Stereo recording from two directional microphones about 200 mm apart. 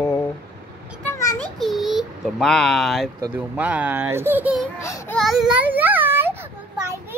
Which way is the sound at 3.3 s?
5° right (ahead or behind).